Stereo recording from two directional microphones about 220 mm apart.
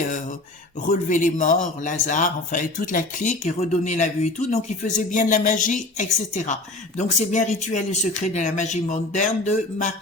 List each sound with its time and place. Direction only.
0.9 s speech: 35° left (ahead or behind)